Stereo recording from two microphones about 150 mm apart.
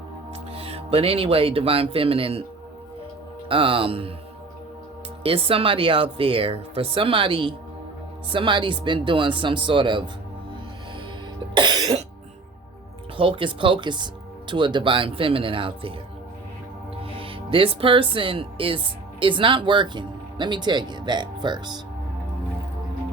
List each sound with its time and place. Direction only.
0.5 s speech: 40° right (ahead or behind)
3.5 s speech: 35° right (ahead or behind)
5.2 s speech: 40° right (ahead or behind)
11.5 s cough: 30° right (ahead or behind)
13.1 s speech: 35° right (ahead or behind)
17.2 s speech: 35° right (ahead or behind)